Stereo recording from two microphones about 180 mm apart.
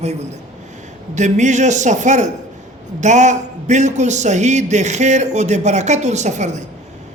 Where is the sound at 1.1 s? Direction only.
40° right (ahead or behind).